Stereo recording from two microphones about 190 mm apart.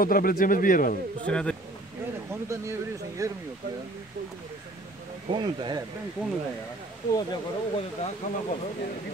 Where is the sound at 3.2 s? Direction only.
15° right (ahead or behind).